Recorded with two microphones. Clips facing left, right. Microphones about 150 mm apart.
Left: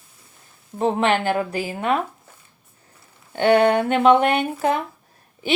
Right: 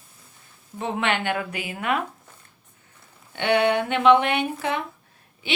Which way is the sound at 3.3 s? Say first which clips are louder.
Left 5 dB; 40° left (ahead or behind).